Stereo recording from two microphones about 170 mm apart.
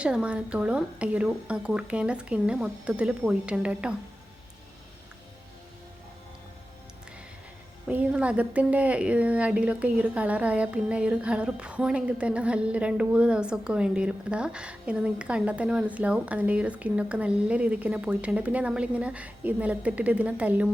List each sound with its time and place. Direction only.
0.0 s a woman's voice: 5° right (ahead or behind)
7.9 s a woman's voice: 5° right (ahead or behind)